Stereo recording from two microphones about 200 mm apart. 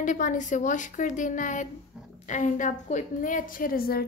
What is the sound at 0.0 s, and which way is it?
A woman's voice, 40° left (ahead or behind).